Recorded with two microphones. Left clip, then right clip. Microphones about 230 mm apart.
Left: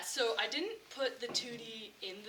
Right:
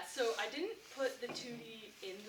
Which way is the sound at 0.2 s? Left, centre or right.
Left.